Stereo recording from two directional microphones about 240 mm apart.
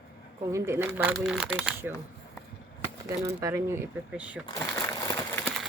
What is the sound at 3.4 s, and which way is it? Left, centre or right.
Speech, centre.